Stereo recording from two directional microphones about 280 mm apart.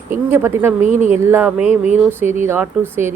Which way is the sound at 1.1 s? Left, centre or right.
Centre.